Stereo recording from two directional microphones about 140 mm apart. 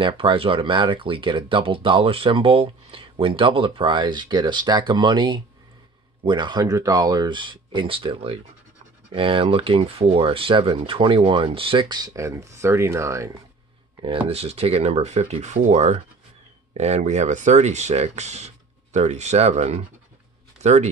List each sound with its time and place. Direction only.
0.0 s speech: 40° right (ahead or behind); by 13.3 s 20° right (ahead or behind)
14.0 s speech: 40° right (ahead or behind)